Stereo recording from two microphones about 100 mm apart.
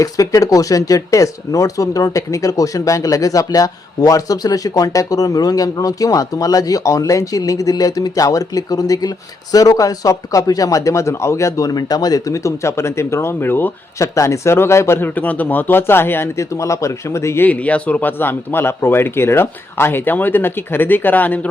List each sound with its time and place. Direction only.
0.0 s speech: 35° left (ahead or behind); by 21.4 s 15° left (ahead or behind)